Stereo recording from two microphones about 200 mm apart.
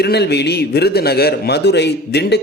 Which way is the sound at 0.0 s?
55° left (ahead or behind).